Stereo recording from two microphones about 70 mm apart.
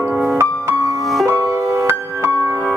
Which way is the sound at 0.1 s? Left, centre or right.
Centre.